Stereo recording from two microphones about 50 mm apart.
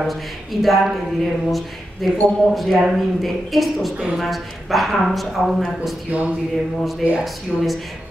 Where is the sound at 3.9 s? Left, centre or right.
Centre.